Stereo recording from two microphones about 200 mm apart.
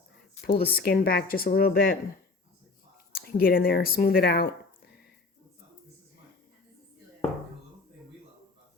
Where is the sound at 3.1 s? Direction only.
50° left (ahead or behind).